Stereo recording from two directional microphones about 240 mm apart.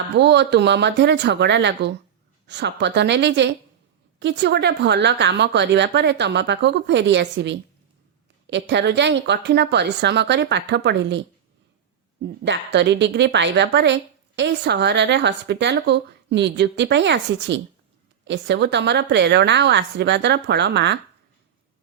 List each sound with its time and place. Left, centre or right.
0.2 s a woman's voice: right